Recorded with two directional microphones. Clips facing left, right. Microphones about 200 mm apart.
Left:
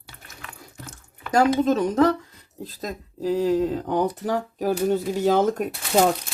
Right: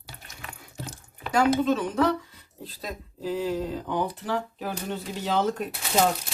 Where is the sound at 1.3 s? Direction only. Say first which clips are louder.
Left 3 dB; 40° left (ahead or behind).